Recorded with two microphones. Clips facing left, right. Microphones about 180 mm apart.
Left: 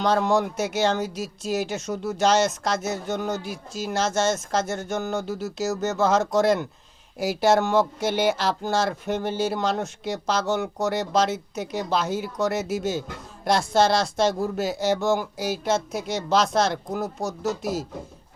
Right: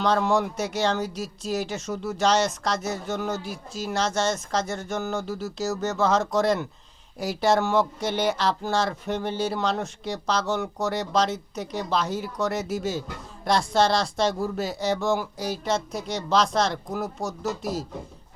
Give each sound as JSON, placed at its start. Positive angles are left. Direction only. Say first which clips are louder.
{"t": 0.1, "sound": "speech", "louder": "left 2 dB", "side_deg": 0}
{"t": 17.2, "sound": "speech", "louder": "left 2 dB", "side_deg": 25}
{"t": 17.6, "sound": "speech", "louder": "left 2 dB", "side_deg": 0}